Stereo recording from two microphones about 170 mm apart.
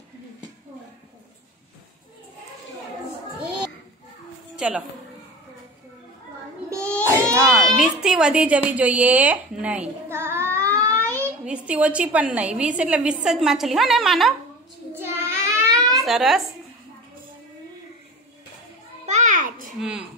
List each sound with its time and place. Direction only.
4.6 s a woman's voice: 5° right (ahead or behind)
6.7 s a sound: 15° right (ahead or behind)
7.7 s a woman's voice: 5° right (ahead or behind)
15.0 s child singing: 15° right (ahead or behind)
16.1 s speech: centre (ahead or behind)
19.0 s a sound: 45° right (ahead or behind)
19.8 s speech: 5° right (ahead or behind)